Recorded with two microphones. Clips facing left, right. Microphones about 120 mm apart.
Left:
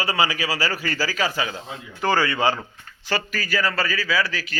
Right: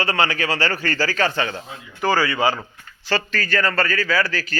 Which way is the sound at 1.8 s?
15° left (ahead or behind).